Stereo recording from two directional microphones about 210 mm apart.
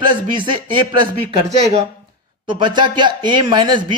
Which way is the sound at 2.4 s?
20° right (ahead or behind).